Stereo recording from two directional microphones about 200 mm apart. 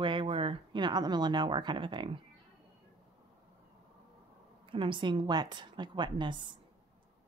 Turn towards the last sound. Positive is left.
turn(degrees=-25)  # may be behind; listen again after turning